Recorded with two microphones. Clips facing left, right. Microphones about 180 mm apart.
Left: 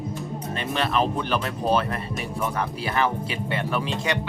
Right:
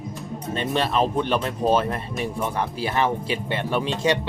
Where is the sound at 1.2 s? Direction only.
25° right (ahead or behind).